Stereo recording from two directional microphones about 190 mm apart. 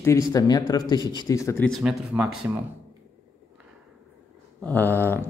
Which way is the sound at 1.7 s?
Centre (ahead or behind).